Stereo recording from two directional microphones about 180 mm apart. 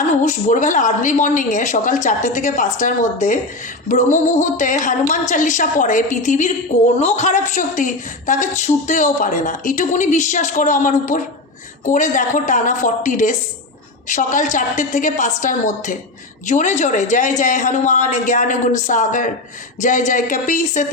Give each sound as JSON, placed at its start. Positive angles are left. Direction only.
{"t": 0.2, "sound": "a woman's voice", "side_deg": 45}